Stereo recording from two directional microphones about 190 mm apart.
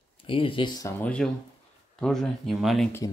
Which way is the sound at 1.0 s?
5° left (ahead or behind).